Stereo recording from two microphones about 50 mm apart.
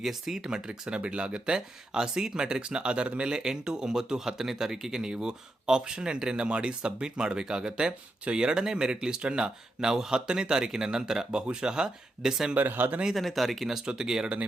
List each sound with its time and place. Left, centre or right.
0.0 s speech: centre
12.5 s speech: right
13.1 s speech: centre